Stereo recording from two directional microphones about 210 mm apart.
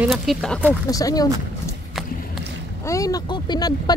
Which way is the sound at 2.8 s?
15° left (ahead or behind).